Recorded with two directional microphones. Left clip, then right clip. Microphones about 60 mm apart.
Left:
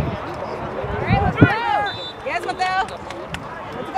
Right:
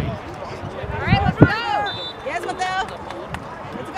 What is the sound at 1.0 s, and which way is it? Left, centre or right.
Run, right.